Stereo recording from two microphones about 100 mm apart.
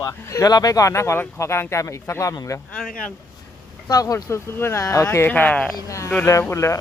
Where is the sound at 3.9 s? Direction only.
35° left (ahead or behind); by 5.7 s 15° left (ahead or behind).